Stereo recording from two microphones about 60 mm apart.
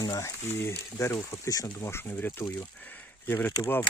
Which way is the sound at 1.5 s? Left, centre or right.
Left.